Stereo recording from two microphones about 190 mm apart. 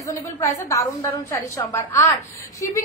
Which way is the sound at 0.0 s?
15° left (ahead or behind).